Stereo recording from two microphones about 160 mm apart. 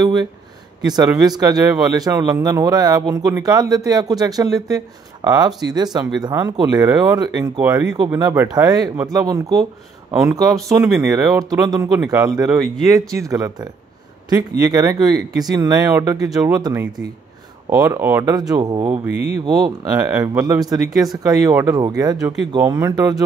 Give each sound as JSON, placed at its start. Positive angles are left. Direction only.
{"t": 0.0, "sound": "speech", "side_deg": -25}